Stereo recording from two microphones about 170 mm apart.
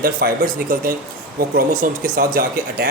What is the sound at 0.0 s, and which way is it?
Speech, 60° right (ahead or behind).